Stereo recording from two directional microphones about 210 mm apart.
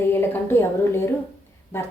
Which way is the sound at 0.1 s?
10° left (ahead or behind).